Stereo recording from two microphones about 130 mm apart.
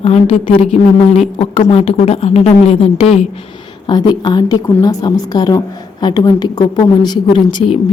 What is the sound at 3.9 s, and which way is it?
A woman's voice, 35° left (ahead or behind).